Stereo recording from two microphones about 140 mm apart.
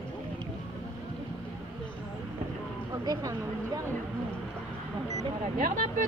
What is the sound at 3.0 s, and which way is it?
Speech, 25° right (ahead or behind).